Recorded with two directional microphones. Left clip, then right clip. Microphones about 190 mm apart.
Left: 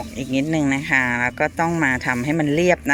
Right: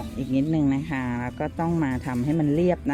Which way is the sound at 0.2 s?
Centre (ahead or behind).